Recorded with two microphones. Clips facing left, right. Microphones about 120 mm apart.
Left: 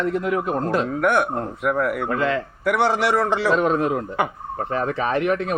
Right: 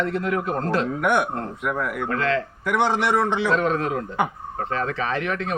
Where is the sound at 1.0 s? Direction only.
Centre (ahead or behind).